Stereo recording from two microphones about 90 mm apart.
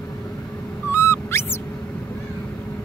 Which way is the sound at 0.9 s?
35° left (ahead or behind).